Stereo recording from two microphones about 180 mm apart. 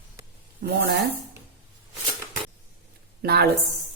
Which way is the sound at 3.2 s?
65° right (ahead or behind).